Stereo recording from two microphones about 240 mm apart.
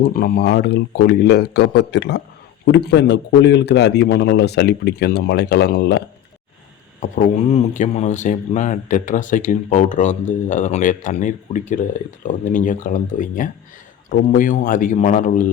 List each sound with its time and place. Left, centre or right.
0.0 s a man's voice: left
7.0 s speech: left